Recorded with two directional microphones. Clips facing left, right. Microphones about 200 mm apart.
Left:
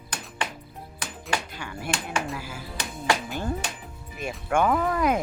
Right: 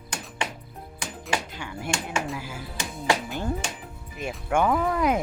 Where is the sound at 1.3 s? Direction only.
15° right (ahead or behind).